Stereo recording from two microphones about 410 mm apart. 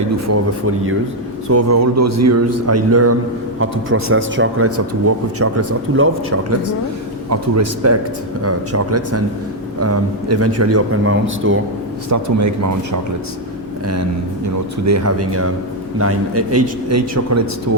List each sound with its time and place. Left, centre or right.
1.5 s a man's voice: right
12.1 s speech: right
14.8 s a man's voice: right